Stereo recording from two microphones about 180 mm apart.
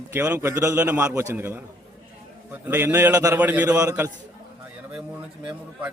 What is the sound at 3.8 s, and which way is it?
Speech, 20° right (ahead or behind).